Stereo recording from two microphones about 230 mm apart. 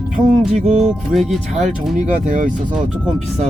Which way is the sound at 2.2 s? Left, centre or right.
Right.